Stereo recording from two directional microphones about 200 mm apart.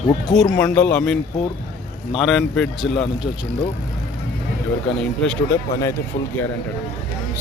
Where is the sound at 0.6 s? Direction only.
5° left (ahead or behind).